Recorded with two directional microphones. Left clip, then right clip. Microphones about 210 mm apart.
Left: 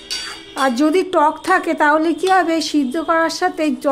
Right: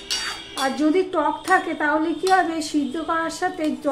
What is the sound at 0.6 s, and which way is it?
A woman's voice, 55° left (ahead or behind).